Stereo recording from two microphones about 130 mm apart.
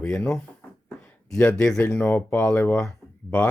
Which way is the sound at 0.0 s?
5° left (ahead or behind).